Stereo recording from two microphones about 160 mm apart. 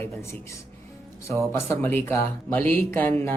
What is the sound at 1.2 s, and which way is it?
Speech, 15° left (ahead or behind).